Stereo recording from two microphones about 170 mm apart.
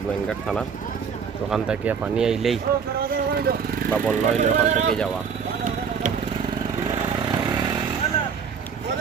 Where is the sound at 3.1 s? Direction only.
65° right (ahead or behind).